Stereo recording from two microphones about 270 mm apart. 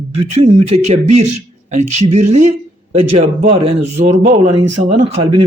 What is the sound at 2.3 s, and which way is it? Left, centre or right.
A man's voice, right.